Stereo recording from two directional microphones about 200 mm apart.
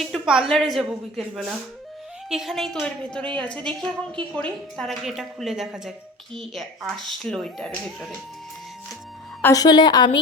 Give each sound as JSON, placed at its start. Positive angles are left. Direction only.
{"t": 0.0, "sound": "a woman's voice", "side_deg": 0}
{"t": 9.4, "sound": "a woman's voice", "side_deg": 15}